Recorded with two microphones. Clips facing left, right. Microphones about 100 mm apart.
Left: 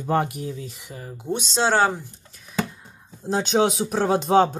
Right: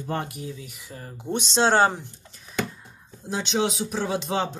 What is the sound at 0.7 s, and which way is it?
Speech, 20° left (ahead or behind).